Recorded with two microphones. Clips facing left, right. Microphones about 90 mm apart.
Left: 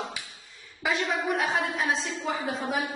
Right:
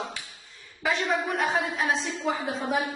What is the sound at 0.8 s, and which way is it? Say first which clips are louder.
A woman's voice: right 1 dB; centre (ahead or behind).